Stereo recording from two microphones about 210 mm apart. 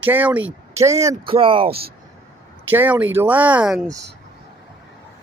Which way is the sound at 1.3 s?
25° right (ahead or behind).